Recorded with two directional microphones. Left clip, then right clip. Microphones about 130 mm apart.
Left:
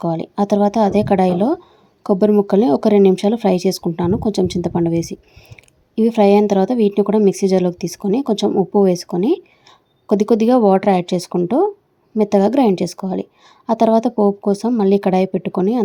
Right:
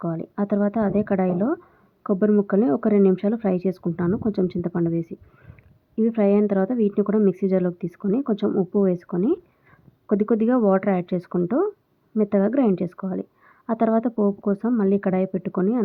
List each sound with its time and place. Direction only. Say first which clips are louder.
0.0 s speech: left 8 dB; 40° left (ahead or behind)
6.0 s a woman's voice: left 7 dB; 40° left (ahead or behind)